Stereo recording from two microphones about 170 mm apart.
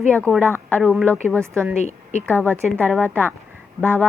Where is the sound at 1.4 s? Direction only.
15° right (ahead or behind).